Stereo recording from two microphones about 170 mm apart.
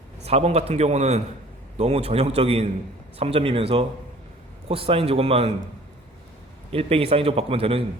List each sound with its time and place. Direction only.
0.3 s a man's voice: 40° right (ahead or behind)
6.7 s a man's voice: 35° right (ahead or behind)